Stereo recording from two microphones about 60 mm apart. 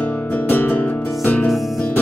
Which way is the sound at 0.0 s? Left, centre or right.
Left.